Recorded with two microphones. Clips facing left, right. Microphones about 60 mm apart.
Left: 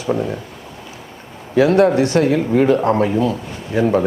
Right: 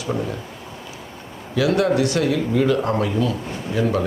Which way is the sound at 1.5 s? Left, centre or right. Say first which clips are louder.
Left 6 dB; left.